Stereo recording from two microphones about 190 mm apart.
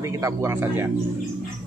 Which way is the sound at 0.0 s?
15° right (ahead or behind).